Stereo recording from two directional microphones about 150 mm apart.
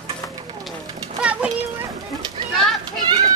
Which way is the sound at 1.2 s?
10° right (ahead or behind).